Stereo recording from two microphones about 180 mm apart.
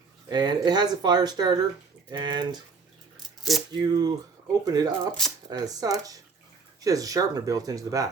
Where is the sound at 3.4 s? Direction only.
Centre (ahead or behind).